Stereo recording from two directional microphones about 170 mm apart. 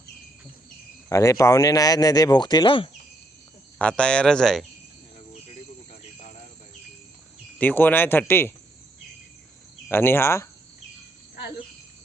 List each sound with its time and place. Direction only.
1.1 s speech: 20° left (ahead or behind)
3.8 s speech: 5° left (ahead or behind)
7.6 s speech: 10° left (ahead or behind)
9.9 s speech: 15° left (ahead or behind)